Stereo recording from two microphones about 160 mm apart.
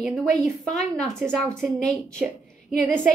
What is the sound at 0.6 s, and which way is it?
A woman's voice, centre (ahead or behind).